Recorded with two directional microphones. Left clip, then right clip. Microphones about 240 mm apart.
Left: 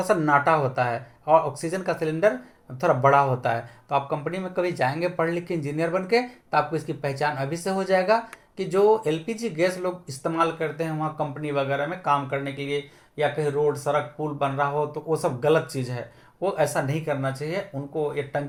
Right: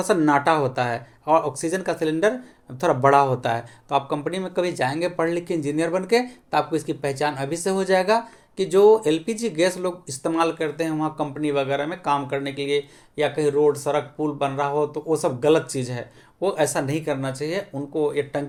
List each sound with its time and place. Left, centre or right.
0.0 s speech: right